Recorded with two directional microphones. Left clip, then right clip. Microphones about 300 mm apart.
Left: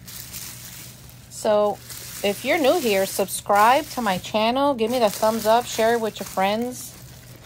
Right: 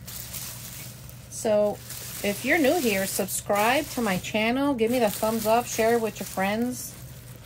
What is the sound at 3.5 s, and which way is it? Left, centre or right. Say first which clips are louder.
Speech: left 7 dB; left.